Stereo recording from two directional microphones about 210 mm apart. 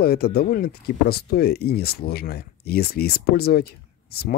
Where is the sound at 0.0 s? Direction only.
45° left (ahead or behind).